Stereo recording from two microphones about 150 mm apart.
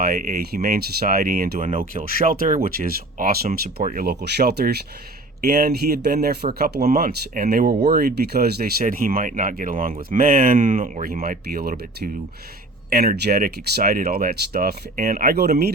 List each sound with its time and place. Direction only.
0.0 s speech: 75° right (ahead or behind)